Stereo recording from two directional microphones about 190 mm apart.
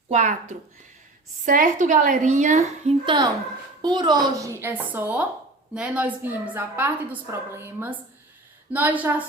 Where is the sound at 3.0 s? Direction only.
25° right (ahead or behind).